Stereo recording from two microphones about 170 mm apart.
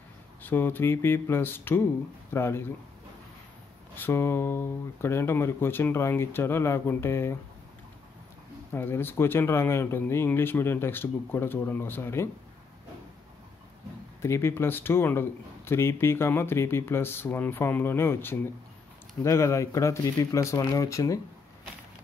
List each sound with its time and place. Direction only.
0.4 s speech: 10° left (ahead or behind)
3.9 s speech: 15° left (ahead or behind)
8.7 s speech: 15° left (ahead or behind)
14.2 s speech: 15° left (ahead or behind)